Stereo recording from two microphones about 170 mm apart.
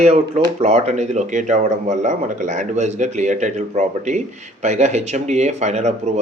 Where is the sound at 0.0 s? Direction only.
40° right (ahead or behind).